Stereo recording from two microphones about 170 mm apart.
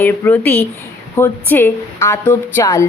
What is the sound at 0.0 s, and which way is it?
A woman's voice, 10° left (ahead or behind).